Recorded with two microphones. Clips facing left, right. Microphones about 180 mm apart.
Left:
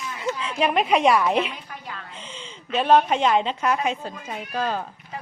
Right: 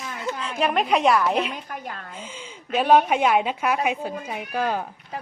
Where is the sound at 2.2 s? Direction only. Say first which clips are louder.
Right 2 dB; 5° right (ahead or behind).